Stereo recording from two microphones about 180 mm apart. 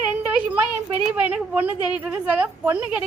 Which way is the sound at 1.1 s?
10° right (ahead or behind).